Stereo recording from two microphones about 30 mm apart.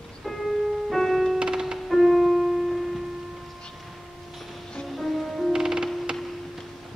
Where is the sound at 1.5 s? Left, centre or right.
Centre.